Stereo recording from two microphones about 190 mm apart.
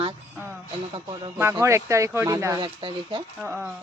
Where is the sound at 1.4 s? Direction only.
15° right (ahead or behind).